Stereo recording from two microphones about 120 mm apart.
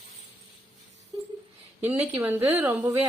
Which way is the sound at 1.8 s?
20° right (ahead or behind).